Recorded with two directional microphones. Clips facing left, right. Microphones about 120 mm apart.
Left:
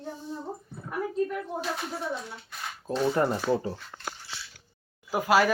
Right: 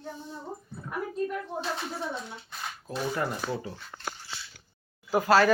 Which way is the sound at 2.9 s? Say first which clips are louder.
Left 6 dB; 25° left (ahead or behind).